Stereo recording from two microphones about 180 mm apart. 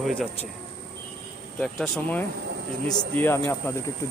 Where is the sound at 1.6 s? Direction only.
5° left (ahead or behind).